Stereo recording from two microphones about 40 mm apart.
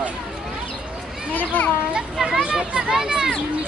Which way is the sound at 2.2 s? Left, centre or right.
Centre.